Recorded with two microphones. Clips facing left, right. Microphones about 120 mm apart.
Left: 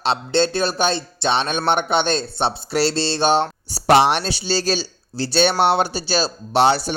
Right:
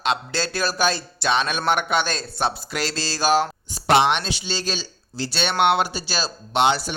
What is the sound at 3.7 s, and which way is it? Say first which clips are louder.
A man's voice: left 3 dB; 40° left (ahead or behind).